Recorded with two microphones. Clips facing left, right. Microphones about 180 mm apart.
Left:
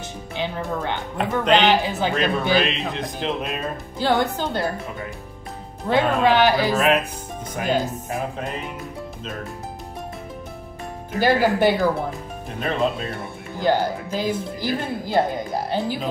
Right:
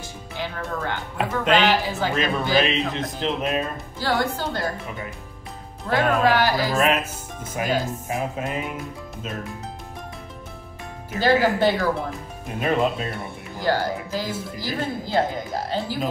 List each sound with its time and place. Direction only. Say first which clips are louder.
0.4 s speech: left 3 dB; 20° left (ahead or behind)
1.1 s speech: left 2 dB; 5° right (ahead or behind)
1.9 s speech: left 2 dB; 20° left (ahead or behind)
2.6 s speech: right 1 dB; centre (ahead or behind)
4.0 s speech: left 3 dB; 20° left (ahead or behind)
5.9 s speech: left 1 dB; 20° left (ahead or behind)
6.7 s speech: left 2 dB; centre (ahead or behind)
11.1 s speech: left 1 dB; 15° left (ahead or behind)
12.5 s speech: right 1 dB; 5° right (ahead or behind)
13.6 s speech: left 3 dB; 20° left (ahead or behind)